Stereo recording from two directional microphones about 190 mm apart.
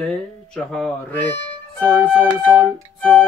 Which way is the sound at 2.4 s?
Centre (ahead or behind).